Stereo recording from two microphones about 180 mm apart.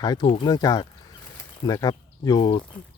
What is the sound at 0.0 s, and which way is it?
Speech, 20° left (ahead or behind).